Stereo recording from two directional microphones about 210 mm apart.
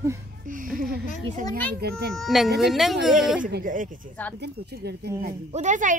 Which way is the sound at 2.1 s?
Centre (ahead or behind).